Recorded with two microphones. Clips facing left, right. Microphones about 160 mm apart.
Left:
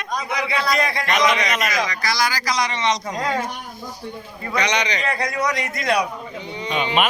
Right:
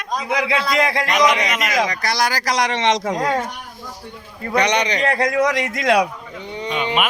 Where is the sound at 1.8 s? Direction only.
60° right (ahead or behind); by 3.2 s 90° right.